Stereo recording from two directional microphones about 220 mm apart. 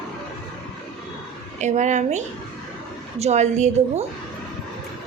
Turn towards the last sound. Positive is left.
turn(degrees=-30)  # may be behind; listen again after turning